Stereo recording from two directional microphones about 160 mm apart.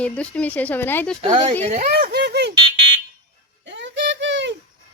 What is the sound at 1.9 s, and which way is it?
Speech, 70° right (ahead or behind).